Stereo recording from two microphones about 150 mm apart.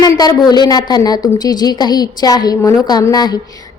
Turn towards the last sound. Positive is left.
turn(degrees=25)  # may be behind; listen again after turning